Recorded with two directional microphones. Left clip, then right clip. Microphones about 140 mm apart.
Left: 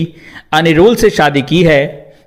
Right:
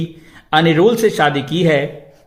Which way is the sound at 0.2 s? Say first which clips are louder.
Left 2 dB; 30° left (ahead or behind).